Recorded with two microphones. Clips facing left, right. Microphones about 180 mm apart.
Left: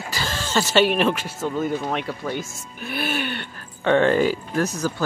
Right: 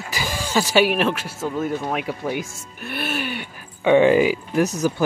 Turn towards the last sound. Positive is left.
turn(degrees=-20)  # may be behind; listen again after turning